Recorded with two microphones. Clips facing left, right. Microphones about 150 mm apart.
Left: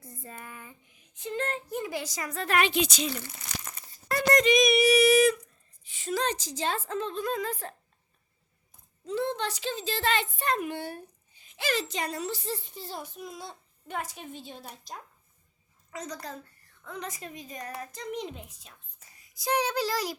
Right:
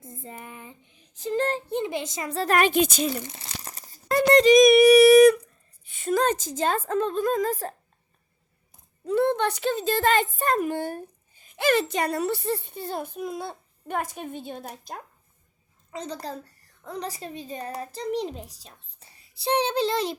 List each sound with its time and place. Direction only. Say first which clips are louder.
0.0 s speech: right 4 dB; 20° right (ahead or behind); by 3.1 s 50° right (ahead or behind)
3.2 s crunch: right 4 dB; 25° right (ahead or behind)
4.1 s a child's voice: right 7 dB; 30° right (ahead or behind)
9.0 s a woman's voice: right 8 dB; 55° right (ahead or behind)
15.9 s a woman's voice: right 5 dB; 30° right (ahead or behind)